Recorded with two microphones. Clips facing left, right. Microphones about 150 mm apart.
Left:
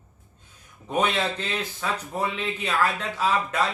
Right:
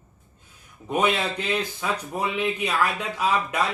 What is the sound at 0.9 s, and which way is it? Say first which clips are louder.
Speech: right 1 dB; 10° right (ahead or behind).